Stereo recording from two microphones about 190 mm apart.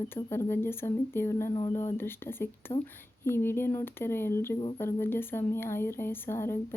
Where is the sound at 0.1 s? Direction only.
10° left (ahead or behind).